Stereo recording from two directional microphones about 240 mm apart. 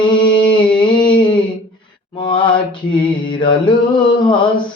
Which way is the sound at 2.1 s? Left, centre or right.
Centre.